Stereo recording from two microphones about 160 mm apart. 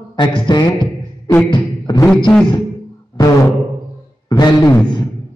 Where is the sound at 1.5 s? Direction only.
25° left (ahead or behind).